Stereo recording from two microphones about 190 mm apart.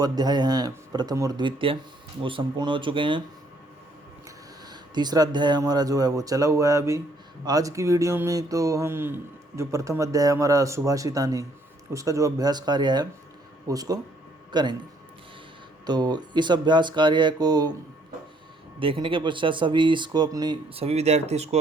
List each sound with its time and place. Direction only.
0.0 s speech: 20° right (ahead or behind)
4.7 s speech: 20° right (ahead or behind)
15.9 s speech: 20° right (ahead or behind)
18.8 s speech: 25° right (ahead or behind)